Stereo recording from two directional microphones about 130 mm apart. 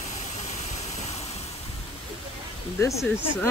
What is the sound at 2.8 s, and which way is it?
Speech, 20° left (ahead or behind).